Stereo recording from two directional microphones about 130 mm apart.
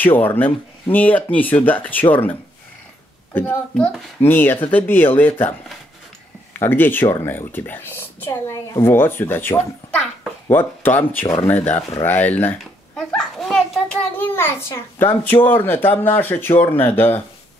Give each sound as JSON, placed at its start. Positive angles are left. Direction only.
{"t": 0.0, "sound": "a woman's voice", "side_deg": 15}
{"t": 3.3, "sound": "a woman's voice", "side_deg": 10}
{"t": 6.6, "sound": "a woman's voice", "side_deg": 15}
{"t": 14.1, "sound": "a woman's voice", "side_deg": 15}